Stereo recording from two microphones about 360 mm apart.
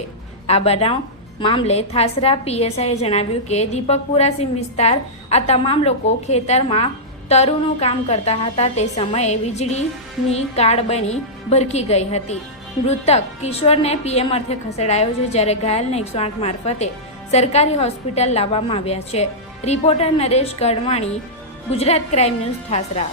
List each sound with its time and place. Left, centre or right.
0.4 s a woman's voice: centre